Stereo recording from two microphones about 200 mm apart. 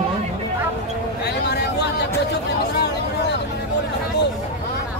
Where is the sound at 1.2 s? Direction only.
55° left (ahead or behind).